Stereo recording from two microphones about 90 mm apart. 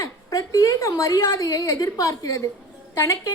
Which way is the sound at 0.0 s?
35° left (ahead or behind).